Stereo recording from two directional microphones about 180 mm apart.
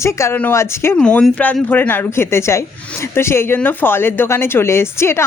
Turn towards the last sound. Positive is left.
turn(degrees=15)  # may be behind; listen again after turning